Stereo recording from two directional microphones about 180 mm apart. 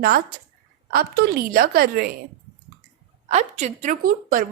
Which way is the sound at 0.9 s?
60° right (ahead or behind).